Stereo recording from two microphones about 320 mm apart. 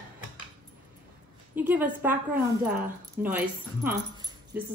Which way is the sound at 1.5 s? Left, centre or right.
Centre.